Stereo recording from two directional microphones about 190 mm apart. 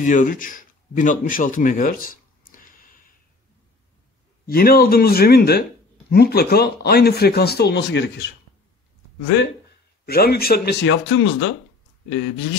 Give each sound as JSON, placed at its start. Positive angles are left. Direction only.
{"t": 0.0, "sound": "a man's voice", "side_deg": 45}
{"t": 4.5, "sound": "speech", "side_deg": 50}
{"t": 10.0, "sound": "speech", "side_deg": 55}